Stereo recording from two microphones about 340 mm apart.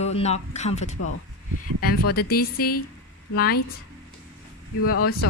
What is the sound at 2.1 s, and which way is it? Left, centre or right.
Speech, left.